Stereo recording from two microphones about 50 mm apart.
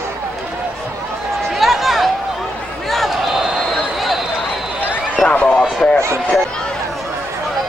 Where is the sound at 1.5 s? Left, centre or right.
Centre.